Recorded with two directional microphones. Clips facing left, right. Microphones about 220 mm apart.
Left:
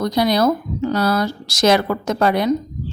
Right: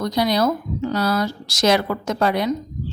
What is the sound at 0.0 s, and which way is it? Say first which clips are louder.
A woman's voice: left 3 dB; 50° left (ahead or behind).